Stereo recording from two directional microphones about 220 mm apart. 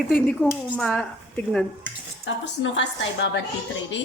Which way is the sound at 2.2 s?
60° left (ahead or behind).